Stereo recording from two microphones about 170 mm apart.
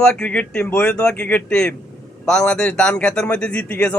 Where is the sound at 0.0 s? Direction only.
5° left (ahead or behind).